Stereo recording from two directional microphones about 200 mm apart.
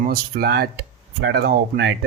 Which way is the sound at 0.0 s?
50° right (ahead or behind).